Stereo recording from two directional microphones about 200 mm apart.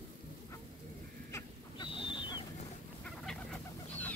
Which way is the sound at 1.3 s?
25° left (ahead or behind).